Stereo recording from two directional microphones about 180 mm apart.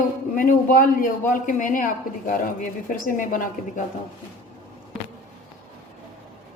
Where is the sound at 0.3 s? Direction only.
50° left (ahead or behind).